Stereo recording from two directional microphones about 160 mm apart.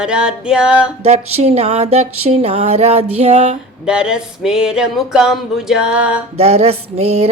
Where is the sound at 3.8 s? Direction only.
5° right (ahead or behind).